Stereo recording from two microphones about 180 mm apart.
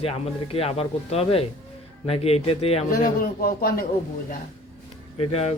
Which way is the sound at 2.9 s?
55° left (ahead or behind).